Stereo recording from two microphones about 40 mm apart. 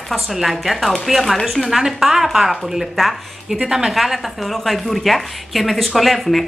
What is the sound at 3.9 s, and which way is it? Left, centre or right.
A woman's voice, centre.